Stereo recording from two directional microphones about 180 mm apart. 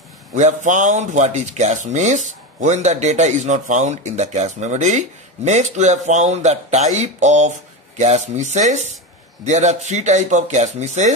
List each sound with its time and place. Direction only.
0.4 s speech: 45° right (ahead or behind)